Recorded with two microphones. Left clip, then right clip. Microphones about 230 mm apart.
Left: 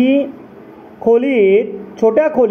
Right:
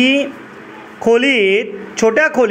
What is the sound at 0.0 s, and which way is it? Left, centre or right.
Speech, centre.